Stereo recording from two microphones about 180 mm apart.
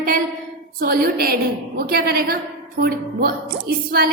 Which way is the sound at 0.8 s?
55° right (ahead or behind).